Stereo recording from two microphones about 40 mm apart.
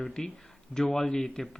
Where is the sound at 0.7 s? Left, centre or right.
Centre.